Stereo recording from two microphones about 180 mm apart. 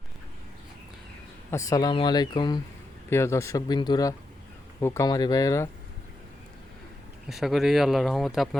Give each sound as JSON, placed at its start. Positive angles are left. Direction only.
{"t": 1.5, "sound": "speech", "side_deg": 15}
{"t": 7.3, "sound": "speech", "side_deg": 0}